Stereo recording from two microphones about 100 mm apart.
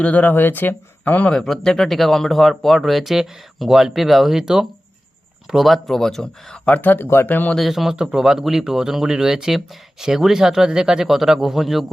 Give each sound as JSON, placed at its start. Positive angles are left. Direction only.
{"t": 0.0, "sound": "speech", "side_deg": 15}
{"t": 1.3, "sound": "speech", "side_deg": 5}
{"t": 6.7, "sound": "speech", "side_deg": 20}
{"t": 7.5, "sound": "speech", "side_deg": 0}